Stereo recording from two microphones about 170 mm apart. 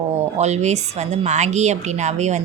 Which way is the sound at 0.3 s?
40° right (ahead or behind).